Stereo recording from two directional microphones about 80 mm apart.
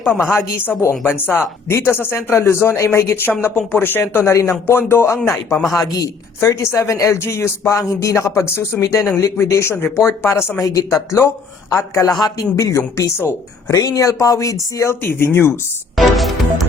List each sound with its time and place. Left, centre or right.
0.8 s speech: left
5.7 s speech: left
6.4 s speech: left
10.6 s speech: left
13.7 s speech: left
15.0 s speech: left
16.0 s music: centre